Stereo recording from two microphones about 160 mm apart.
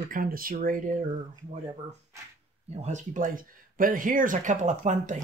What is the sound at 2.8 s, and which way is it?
Speech, 50° right (ahead or behind).